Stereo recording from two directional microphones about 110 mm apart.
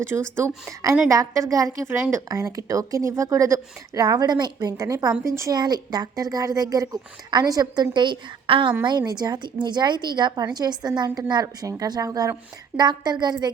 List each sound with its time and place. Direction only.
0.1 s a woman's voice: 25° right (ahead or behind)
5.5 s a woman's voice: 40° right (ahead or behind)